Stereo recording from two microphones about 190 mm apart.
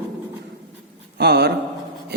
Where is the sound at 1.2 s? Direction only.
60° right (ahead or behind).